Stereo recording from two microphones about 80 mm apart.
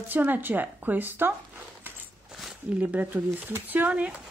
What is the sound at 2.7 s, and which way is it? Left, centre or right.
Speech, centre.